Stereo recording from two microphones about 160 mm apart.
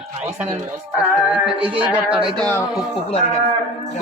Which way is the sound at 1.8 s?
10° right (ahead or behind).